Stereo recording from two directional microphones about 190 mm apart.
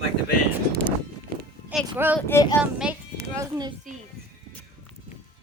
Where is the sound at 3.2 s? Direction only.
20° right (ahead or behind).